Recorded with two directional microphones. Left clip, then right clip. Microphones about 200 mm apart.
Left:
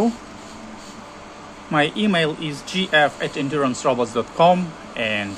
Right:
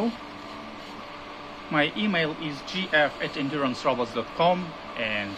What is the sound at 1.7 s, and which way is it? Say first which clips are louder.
Speech: left 5 dB; 30° left (ahead or behind).